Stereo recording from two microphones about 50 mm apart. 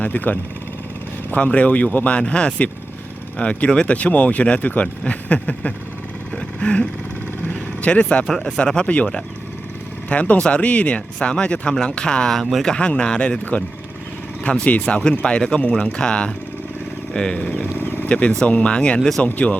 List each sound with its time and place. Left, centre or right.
0.0 s speech: left
1.4 s speech: left
2.1 s speech: left
3.9 s speech: left
6.3 s vehicle: left
7.4 s speech: left
8.3 s speech: centre
12.4 s speech: centre
12.6 s speech: left
14.4 s speech: left
17.7 s a sound: left
18.1 s speech: centre